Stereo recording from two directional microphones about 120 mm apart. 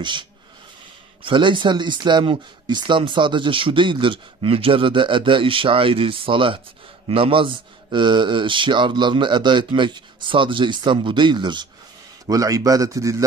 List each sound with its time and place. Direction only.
0.0 s speech: 40° right (ahead or behind)
12.3 s a man's voice: 30° right (ahead or behind)